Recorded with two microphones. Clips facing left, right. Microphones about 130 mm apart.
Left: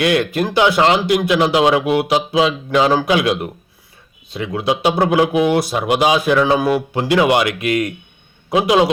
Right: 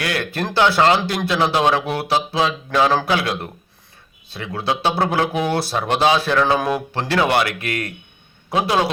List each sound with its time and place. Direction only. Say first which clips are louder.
0.0 s speech: left 7 dB; 20° left (ahead or behind)